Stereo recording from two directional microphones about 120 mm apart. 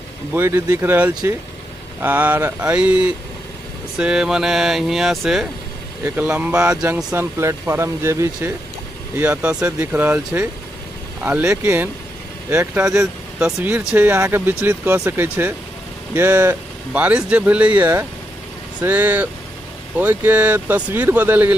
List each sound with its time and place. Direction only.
0.3 s speech: 20° right (ahead or behind)
7.2 s speech: 20° right (ahead or behind)
9.2 s speech: 10° right (ahead or behind)
16.9 s speech: 10° right (ahead or behind)